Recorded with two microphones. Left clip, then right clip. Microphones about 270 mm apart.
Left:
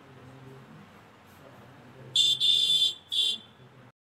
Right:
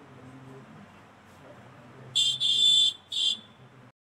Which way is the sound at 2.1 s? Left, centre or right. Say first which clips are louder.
Left 2 dB; centre.